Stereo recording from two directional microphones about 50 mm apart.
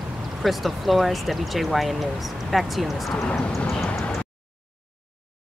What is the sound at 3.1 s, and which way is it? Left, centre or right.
Speech, centre.